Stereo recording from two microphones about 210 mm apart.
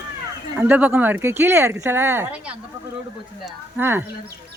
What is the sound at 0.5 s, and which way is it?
Speech, 10° right (ahead or behind).